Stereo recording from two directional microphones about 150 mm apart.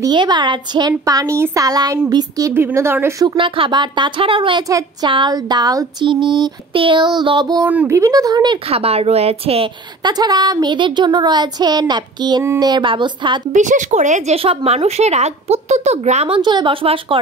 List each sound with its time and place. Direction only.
0.0 s speech: 30° right (ahead or behind)
3.3 s speech: 35° right (ahead or behind)
4.6 s speech: 20° right (ahead or behind)
7.6 s speech: 10° right (ahead or behind)
8.0 s speech: 25° right (ahead or behind)
8.6 s speech: 40° right (ahead or behind)
10.0 s speech: 25° right (ahead or behind)
13.5 s speech: 55° right (ahead or behind)
16.3 s speech: 30° right (ahead or behind)